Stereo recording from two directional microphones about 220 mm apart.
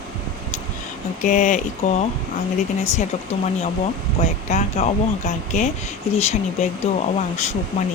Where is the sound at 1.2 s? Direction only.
35° left (ahead or behind).